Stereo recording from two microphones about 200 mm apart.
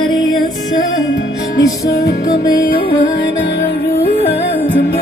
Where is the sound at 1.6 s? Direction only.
15° left (ahead or behind).